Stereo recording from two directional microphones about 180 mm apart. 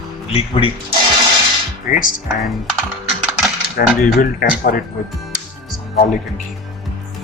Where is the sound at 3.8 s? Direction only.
60° left (ahead or behind).